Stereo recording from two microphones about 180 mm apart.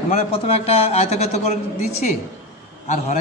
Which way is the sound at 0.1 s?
35° left (ahead or behind).